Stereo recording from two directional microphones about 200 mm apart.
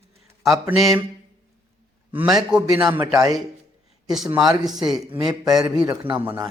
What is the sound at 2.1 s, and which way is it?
A man's voice, 5° right (ahead or behind).